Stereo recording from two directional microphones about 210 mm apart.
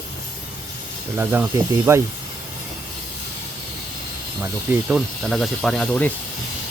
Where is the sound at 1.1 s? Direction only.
10° right (ahead or behind).